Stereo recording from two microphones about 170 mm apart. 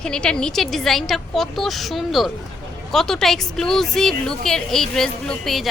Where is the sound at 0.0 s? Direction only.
5° left (ahead or behind).